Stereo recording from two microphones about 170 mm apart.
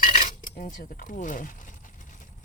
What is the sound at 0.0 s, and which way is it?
Cutlery, 50° left (ahead or behind).